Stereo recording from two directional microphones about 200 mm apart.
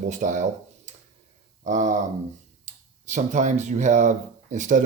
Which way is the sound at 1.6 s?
40° right (ahead or behind).